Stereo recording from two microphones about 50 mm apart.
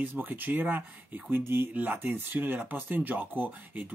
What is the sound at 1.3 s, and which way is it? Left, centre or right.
Speech, right.